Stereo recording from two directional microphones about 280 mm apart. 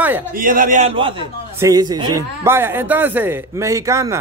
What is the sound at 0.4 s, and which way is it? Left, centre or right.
A man's voice, right.